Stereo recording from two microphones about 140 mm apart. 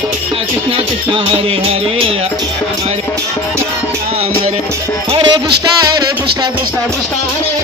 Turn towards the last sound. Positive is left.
turn(degrees=-30)  # may be behind; listen again after turning